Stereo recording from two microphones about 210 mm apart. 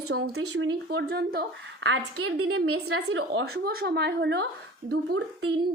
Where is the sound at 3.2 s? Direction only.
50° right (ahead or behind).